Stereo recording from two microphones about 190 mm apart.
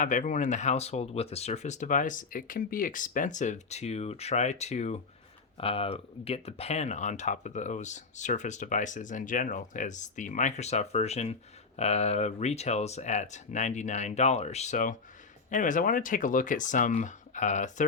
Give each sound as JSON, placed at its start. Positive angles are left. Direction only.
{"t": 0.0, "sound": "speech", "side_deg": 40}